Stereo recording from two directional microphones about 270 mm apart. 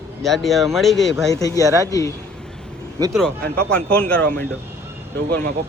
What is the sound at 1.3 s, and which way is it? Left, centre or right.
Speech, centre.